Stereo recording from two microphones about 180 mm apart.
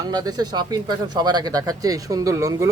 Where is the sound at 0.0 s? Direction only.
20° right (ahead or behind).